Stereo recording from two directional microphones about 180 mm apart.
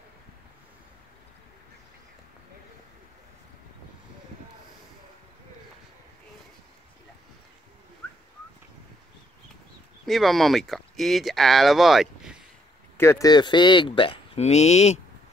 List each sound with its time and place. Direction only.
10.0 s speech: centre (ahead or behind)
12.9 s speech: 15° left (ahead or behind); by 15.0 s 40° left (ahead or behind)